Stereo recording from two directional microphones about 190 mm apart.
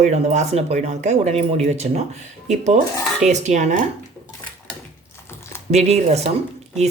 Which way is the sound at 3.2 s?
40° right (ahead or behind).